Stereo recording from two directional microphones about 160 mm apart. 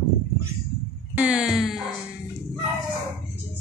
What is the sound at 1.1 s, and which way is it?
Speech, 5° right (ahead or behind).